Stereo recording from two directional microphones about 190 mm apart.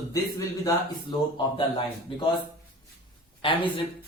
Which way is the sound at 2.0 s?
25° left (ahead or behind).